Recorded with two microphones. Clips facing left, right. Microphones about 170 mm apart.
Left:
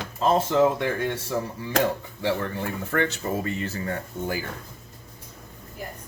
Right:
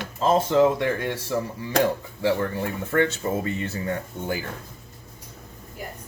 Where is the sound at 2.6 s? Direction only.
25° right (ahead or behind).